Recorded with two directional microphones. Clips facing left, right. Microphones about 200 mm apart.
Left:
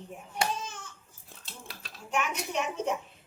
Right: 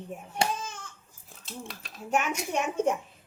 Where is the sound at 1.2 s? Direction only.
Centre (ahead or behind).